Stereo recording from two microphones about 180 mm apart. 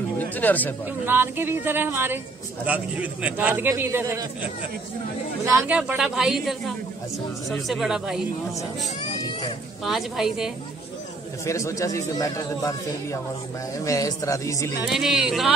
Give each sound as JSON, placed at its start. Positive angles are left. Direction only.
{"t": 0.2, "sound": "speech", "side_deg": 10}
{"t": 1.0, "sound": "a man's voice", "side_deg": -10}
{"t": 5.4, "sound": "a man's voice", "side_deg": -15}
{"t": 9.8, "sound": "speech", "side_deg": 0}
{"t": 11.4, "sound": "a man's voice", "side_deg": 15}
{"t": 14.9, "sound": "speech", "side_deg": 0}